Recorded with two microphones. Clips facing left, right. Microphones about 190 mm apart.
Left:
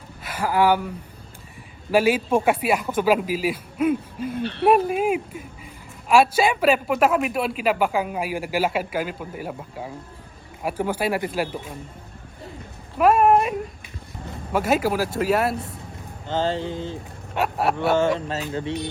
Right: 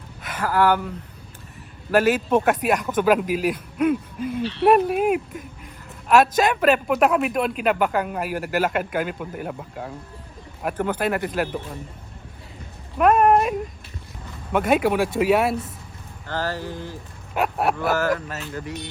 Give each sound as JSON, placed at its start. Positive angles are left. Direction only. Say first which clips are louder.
{"t": 0.2, "sound": "speech", "louder": "even", "side_deg": 10}
{"t": 4.4, "sound": "speech", "louder": "right 1 dB", "side_deg": 55}
{"t": 4.7, "sound": "a man's voice", "louder": "right 1 dB", "side_deg": -5}
{"t": 5.3, "sound": "a man's voice", "louder": "even", "side_deg": 5}
{"t": 13.0, "sound": "a man's voice", "louder": "even", "side_deg": 5}
{"t": 16.2, "sound": "speech", "louder": "left 4 dB", "side_deg": 25}
{"t": 17.3, "sound": "a man's voice", "louder": "even", "side_deg": 0}
{"t": 17.7, "sound": "speech", "louder": "left 2 dB", "side_deg": 25}